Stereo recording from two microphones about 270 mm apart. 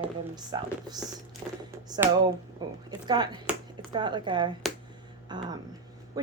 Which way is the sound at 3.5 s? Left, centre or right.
Centre.